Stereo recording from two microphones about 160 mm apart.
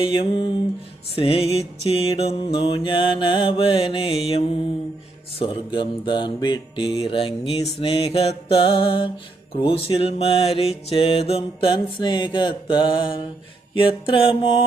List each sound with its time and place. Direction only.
0.0 s mantra: 35° left (ahead or behind)